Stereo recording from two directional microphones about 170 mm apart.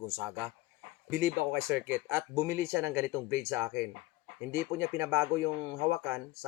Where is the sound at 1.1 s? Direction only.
15° right (ahead or behind).